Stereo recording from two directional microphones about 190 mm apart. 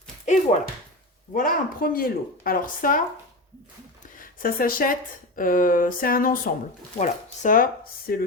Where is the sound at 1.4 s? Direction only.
50° left (ahead or behind).